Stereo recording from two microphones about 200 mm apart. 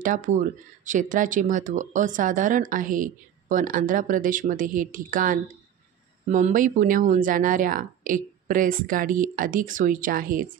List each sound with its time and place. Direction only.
0.0 s speech: 40° right (ahead or behind)